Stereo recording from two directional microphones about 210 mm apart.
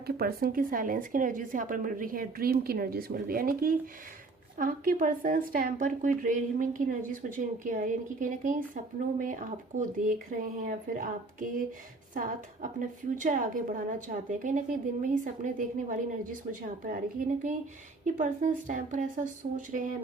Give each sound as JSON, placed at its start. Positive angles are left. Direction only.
{"t": 0.1, "sound": "speech", "side_deg": -50}